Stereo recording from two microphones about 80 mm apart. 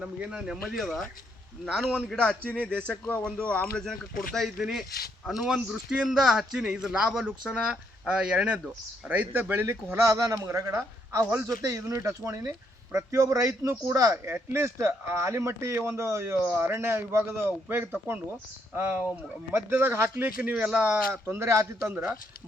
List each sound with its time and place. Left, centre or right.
0.0 s speech: centre; by 9.6 s right
9.6 s a woman's voice: right
14.3 s speech: right
20.2 s speech: centre
21.1 s speech: right